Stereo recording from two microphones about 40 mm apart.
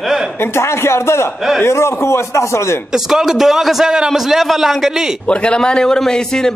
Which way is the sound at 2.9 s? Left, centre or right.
Centre.